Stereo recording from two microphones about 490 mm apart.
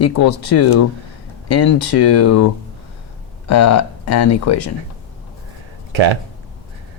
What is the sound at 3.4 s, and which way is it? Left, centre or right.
Speech, left.